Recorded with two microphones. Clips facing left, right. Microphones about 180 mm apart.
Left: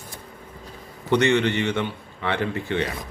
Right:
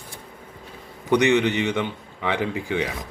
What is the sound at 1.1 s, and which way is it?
A man's voice, 15° right (ahead or behind).